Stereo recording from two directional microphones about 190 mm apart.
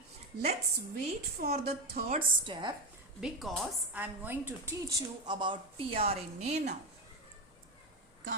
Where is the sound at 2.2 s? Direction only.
25° right (ahead or behind).